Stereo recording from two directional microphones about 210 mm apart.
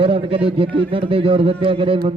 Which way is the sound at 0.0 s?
25° right (ahead or behind).